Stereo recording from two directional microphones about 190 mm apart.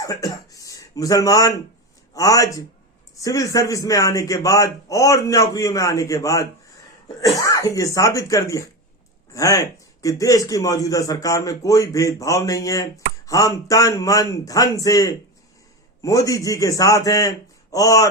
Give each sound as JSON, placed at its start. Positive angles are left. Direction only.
{"t": 0.0, "sound": "a man's voice", "side_deg": 20}